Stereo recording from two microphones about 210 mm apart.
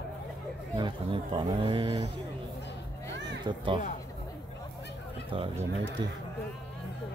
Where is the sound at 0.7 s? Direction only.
25° right (ahead or behind).